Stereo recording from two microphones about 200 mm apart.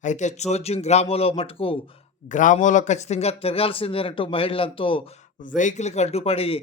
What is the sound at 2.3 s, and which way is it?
A man's voice, 40° left (ahead or behind).